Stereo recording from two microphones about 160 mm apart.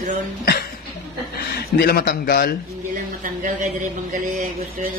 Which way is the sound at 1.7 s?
80° left.